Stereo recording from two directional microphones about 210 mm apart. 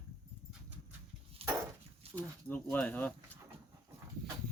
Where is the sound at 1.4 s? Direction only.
30° right (ahead or behind).